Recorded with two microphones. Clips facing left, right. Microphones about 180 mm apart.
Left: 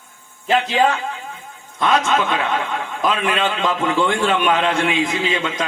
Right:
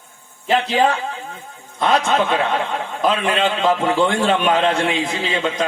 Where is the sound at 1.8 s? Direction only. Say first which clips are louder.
Right 1 dB; 35° right (ahead or behind).